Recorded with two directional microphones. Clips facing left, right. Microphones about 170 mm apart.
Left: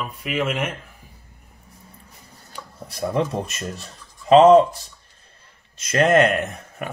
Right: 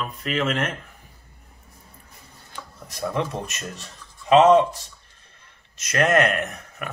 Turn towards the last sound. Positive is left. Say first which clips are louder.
# left 2 dB
turn(degrees=25)  # may be behind; listen again after turning